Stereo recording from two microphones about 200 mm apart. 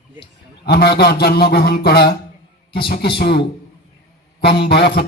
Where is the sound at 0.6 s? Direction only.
50° left (ahead or behind).